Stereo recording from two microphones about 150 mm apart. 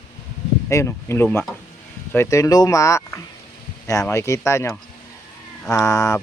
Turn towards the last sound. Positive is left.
turn(degrees=20)  # may be behind; listen again after turning